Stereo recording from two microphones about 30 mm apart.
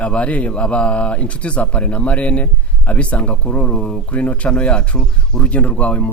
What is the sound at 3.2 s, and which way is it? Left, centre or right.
Speech, left.